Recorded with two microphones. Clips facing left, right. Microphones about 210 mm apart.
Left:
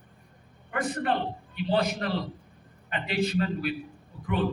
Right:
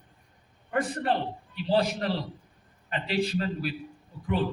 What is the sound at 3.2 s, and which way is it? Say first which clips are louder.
Speech: left 2 dB; 35° right (ahead or behind).